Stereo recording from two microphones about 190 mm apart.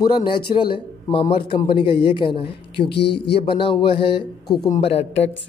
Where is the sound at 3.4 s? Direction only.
25° left (ahead or behind).